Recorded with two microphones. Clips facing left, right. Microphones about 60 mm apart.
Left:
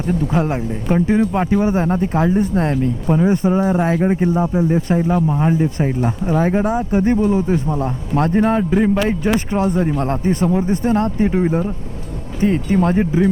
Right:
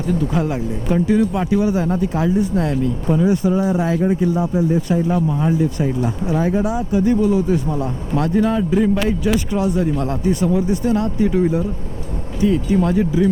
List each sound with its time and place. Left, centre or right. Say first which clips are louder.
0.1 s speech: left 1 dB; left
12.4 s speech: even; left